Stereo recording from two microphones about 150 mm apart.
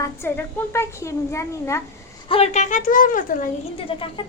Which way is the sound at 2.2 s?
40° left (ahead or behind).